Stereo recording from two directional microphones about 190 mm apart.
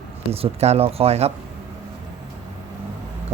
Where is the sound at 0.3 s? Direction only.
35° right (ahead or behind).